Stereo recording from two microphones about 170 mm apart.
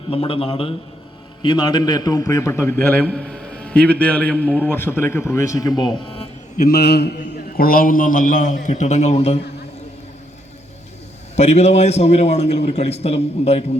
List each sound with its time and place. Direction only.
0.1 s a man's voice: 35° left (ahead or behind)
6.7 s a man's voice: 70° left (ahead or behind)
7.5 s a man's voice: 60° left (ahead or behind); by 9.4 s 40° left (ahead or behind)
11.3 s a man's voice: 40° left (ahead or behind)